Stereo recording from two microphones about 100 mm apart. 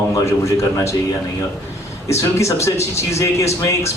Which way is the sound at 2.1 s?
30° left (ahead or behind).